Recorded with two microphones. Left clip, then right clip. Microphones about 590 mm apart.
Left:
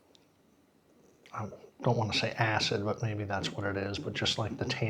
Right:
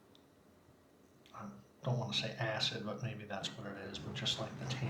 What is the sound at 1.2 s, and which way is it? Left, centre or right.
Speech, left.